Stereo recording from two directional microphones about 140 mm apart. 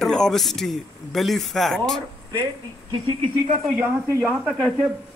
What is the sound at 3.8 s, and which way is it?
Speech, 20° right (ahead or behind).